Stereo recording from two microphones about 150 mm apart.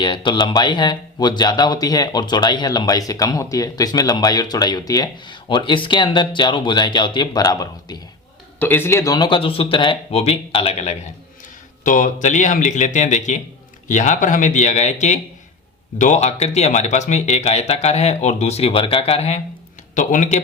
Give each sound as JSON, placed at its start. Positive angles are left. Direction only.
{"t": 0.0, "sound": "speech", "side_deg": 30}
{"t": 8.5, "sound": "speech", "side_deg": 15}
{"t": 11.8, "sound": "speech", "side_deg": 60}
{"t": 20.0, "sound": "speech", "side_deg": 60}